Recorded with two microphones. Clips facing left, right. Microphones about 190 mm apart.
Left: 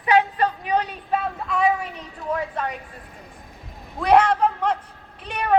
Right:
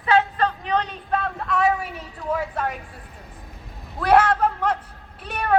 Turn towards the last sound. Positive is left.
turn(degrees=-5)  # may be behind; listen again after turning